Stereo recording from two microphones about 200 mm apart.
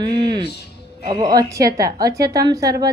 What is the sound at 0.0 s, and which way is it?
Music, 25° right (ahead or behind).